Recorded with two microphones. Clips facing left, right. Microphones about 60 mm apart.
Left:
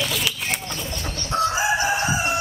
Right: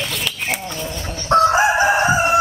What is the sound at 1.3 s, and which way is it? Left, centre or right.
Chicken, right.